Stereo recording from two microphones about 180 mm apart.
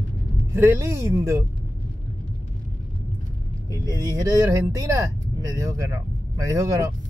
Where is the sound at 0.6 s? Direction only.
15° right (ahead or behind).